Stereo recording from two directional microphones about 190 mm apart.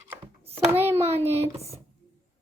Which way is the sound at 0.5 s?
10° right (ahead or behind).